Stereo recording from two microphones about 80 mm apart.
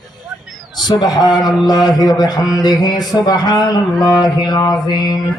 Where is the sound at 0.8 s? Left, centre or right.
Left.